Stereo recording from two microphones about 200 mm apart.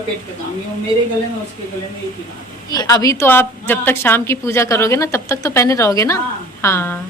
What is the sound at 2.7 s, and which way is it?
A woman's voice, 20° left (ahead or behind).